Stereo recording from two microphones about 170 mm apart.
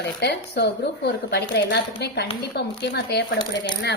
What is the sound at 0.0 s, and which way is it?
Speech, 75° left (ahead or behind).